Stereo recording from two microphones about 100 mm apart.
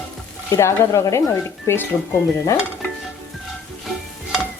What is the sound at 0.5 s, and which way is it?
Stir, 30° left (ahead or behind).